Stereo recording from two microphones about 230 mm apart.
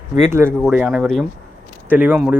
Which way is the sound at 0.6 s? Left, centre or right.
Centre.